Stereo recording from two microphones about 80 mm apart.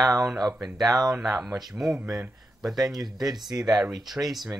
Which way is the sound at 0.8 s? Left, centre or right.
Right.